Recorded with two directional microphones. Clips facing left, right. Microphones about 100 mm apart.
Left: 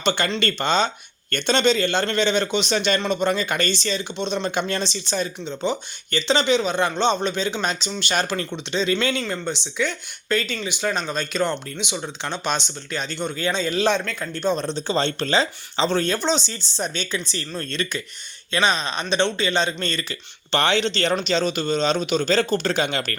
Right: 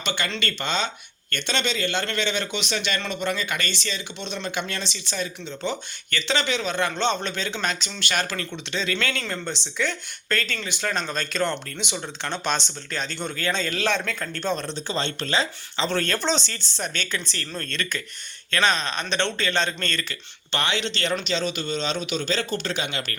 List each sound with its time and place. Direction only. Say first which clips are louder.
0.0 s a man's voice: left 6 dB; 35° left (ahead or behind); by 9.2 s 20° left (ahead or behind)
9.2 s speech: left 4 dB; 10° left (ahead or behind)
14.0 s speech: left 1 dB; centre (ahead or behind)
14.3 s speech: left 5 dB; 15° left (ahead or behind)
14.7 s a man's voice: left 5 dB; 30° left (ahead or behind)
15.9 s speech: left 2 dB; 15° left (ahead or behind)
20.5 s a man's voice: left 6 dB; 35° left (ahead or behind)